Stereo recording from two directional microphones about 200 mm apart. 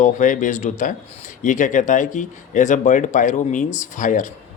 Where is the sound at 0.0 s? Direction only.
40° left (ahead or behind).